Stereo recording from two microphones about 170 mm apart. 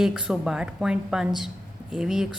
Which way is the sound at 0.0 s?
5° right (ahead or behind).